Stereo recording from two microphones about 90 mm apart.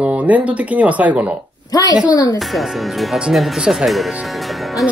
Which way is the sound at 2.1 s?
50° left (ahead or behind).